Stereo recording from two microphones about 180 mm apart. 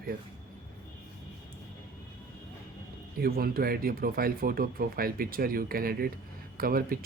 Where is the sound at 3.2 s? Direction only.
55° right (ahead or behind).